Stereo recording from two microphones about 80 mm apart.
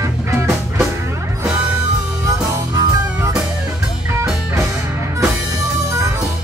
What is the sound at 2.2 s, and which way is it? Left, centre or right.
Music, right.